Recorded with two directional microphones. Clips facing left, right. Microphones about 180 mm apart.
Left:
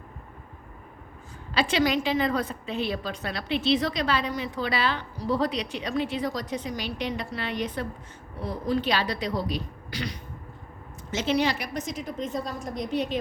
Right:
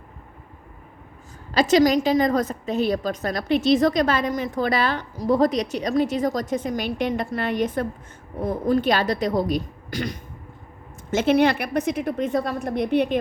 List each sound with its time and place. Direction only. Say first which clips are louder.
1.5 s a woman's voice: right 7 dB; 40° right (ahead or behind); by 13.1 s 60° right (ahead or behind)